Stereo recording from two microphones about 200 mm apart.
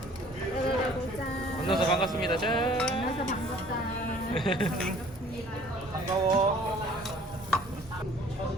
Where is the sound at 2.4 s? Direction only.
5° left (ahead or behind).